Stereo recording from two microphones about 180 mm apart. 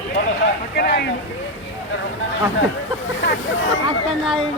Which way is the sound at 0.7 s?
70° left (ahead or behind).